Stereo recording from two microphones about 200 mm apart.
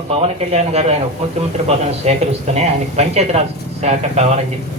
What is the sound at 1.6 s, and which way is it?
Speech, 30° right (ahead or behind).